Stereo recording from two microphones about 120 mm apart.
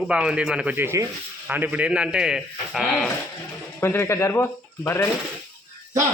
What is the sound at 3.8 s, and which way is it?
Speech, 20° left (ahead or behind).